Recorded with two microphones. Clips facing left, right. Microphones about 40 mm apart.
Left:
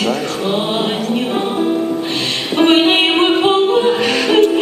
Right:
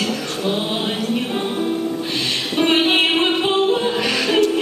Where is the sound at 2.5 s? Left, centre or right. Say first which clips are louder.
Left 5 dB; centre.